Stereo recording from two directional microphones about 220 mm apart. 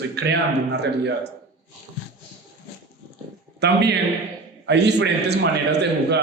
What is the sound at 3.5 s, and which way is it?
A man's voice, 55° right (ahead or behind).